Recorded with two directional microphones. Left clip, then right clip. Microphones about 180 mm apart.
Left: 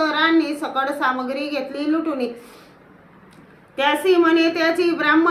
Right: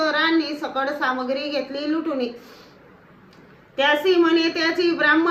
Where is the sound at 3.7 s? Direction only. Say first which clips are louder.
Left 1 dB; 20° left (ahead or behind).